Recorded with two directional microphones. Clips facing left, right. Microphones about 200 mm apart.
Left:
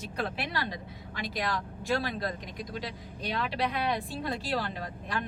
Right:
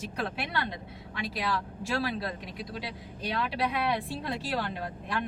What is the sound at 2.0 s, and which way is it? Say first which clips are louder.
Speech: right 1 dB; 5° right (ahead or behind).